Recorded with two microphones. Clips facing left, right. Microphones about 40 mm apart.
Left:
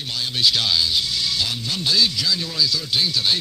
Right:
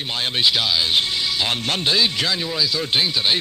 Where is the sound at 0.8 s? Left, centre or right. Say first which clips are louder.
Right 2 dB; right.